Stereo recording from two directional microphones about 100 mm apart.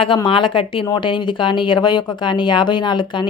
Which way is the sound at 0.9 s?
50° left (ahead or behind).